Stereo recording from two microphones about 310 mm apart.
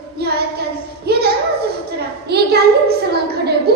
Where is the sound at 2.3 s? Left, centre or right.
Right.